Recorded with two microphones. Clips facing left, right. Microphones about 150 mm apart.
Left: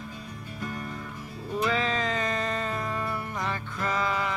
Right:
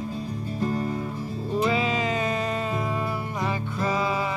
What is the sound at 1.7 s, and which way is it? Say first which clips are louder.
Music: right 3 dB; 10° right (ahead or behind).